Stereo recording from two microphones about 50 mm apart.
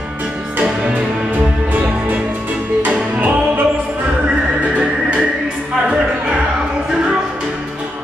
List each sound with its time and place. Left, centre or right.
0.6 s music: right